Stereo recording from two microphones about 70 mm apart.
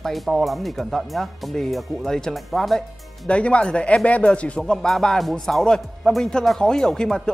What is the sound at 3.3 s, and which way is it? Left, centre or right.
Speech, centre.